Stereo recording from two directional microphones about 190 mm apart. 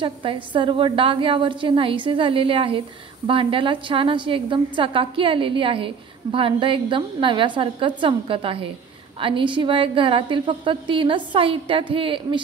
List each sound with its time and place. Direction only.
0.0 s a woman's voice: 25° right (ahead or behind)